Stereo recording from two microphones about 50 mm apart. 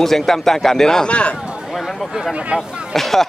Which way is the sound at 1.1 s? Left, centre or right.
Left.